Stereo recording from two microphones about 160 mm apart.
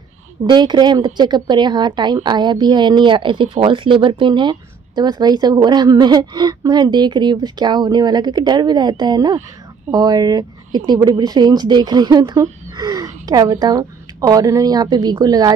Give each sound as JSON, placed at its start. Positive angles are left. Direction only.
{"t": 0.4, "sound": "speech", "side_deg": -30}